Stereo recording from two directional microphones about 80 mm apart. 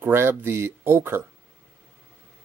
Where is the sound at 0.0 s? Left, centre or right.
Right.